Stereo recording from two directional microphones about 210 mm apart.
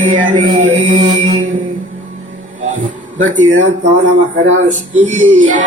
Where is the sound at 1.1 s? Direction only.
35° right (ahead or behind).